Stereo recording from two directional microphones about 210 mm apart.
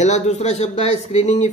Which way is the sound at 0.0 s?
35° left (ahead or behind).